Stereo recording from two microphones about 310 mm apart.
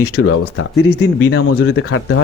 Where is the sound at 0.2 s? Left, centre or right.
Left.